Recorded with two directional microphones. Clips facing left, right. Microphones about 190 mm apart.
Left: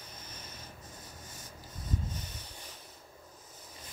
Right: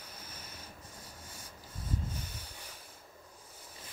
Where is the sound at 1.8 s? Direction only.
10° right (ahead or behind).